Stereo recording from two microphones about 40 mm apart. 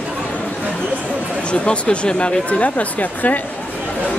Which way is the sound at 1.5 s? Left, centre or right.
Left.